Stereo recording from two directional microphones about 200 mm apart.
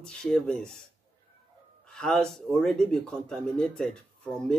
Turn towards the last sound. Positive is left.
turn(degrees=5)  # may be behind; listen again after turning